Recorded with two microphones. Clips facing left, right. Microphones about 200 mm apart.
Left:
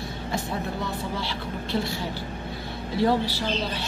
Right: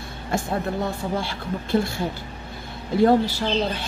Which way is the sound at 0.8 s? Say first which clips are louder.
Right 4 dB; 50° right (ahead or behind).